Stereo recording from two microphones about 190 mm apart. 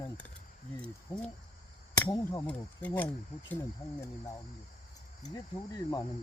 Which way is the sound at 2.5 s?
10° left (ahead or behind).